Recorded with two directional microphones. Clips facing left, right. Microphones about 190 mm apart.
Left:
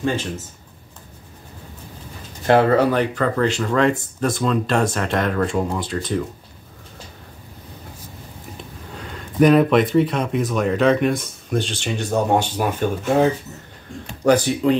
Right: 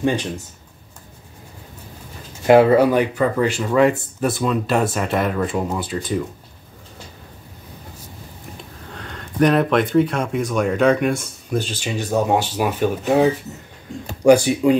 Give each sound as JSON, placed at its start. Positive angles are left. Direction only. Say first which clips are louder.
{"t": 0.0, "sound": "speech", "louder": "right 2 dB", "side_deg": -15}
{"t": 2.4, "sound": "speech", "louder": "right 3 dB", "side_deg": -10}
{"t": 8.9, "sound": "speech", "louder": "left 3 dB", "side_deg": 5}